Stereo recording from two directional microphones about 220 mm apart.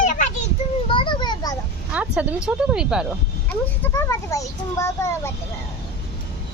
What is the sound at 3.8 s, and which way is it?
A child's voice, 15° left (ahead or behind).